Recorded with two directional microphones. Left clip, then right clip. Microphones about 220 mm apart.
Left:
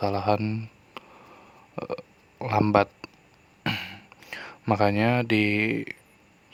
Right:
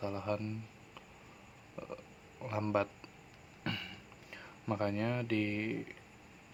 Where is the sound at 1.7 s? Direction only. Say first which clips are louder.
Left 13 dB; 40° left (ahead or behind).